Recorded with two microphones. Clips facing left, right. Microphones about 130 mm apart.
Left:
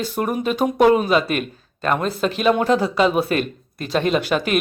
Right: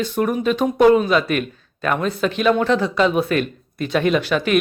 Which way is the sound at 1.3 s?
40° left (ahead or behind).